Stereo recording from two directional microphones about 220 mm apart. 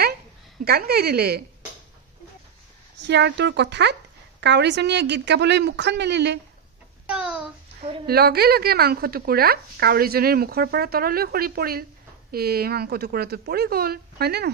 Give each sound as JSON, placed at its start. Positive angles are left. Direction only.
{"t": 0.7, "sound": "a woman's voice", "side_deg": -45}
{"t": 3.0, "sound": "a woman's voice", "side_deg": -50}
{"t": 7.1, "sound": "a sound", "side_deg": -5}
{"t": 8.1, "sound": "a woman's voice", "side_deg": -45}